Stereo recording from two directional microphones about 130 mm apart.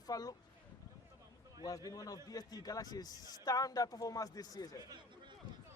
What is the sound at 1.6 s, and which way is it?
A man's voice, 25° left (ahead or behind).